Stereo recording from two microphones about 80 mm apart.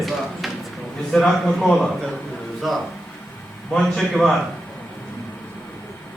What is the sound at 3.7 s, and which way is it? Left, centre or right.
Speech, centre.